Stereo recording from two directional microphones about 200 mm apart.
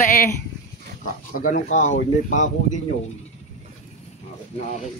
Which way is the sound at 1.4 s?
40° left (ahead or behind).